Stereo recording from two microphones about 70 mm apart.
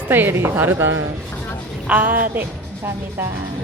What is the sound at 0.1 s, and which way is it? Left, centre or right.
Speech, right.